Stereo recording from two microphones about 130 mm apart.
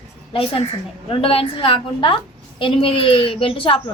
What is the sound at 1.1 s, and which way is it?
A child's voice, 45° left (ahead or behind).